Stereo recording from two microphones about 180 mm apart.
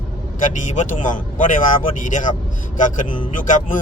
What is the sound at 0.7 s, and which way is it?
Speech, 45° left (ahead or behind).